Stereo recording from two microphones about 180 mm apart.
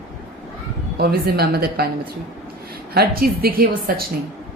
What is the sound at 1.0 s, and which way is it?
Speech, 60° right (ahead or behind).